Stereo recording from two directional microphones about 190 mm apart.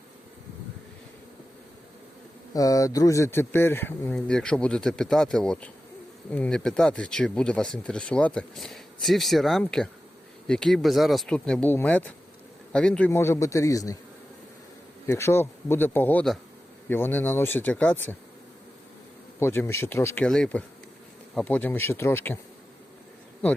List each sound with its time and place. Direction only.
2.5 s speech: 20° left (ahead or behind)
15.0 s speech: 15° left (ahead or behind)
19.4 s speech: 15° left (ahead or behind)